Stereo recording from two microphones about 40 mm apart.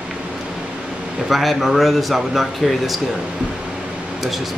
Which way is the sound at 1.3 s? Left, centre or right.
Centre.